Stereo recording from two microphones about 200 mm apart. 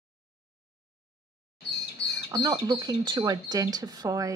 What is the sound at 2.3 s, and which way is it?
Speech, 20° right (ahead or behind).